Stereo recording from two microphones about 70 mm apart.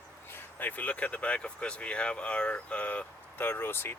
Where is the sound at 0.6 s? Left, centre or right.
Left.